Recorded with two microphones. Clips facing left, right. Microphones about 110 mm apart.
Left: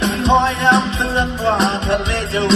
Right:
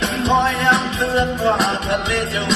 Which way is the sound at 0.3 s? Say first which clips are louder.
Left 2 dB; 25° left (ahead or behind).